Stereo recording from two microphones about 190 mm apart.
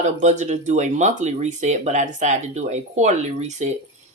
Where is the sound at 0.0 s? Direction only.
40° right (ahead or behind).